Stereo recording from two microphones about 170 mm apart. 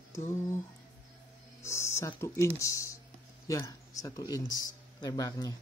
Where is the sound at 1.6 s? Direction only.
15° left (ahead or behind).